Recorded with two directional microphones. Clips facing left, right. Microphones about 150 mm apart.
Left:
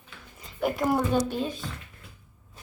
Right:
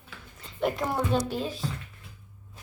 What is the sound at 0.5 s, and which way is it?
A woman's voice, 5° left (ahead or behind).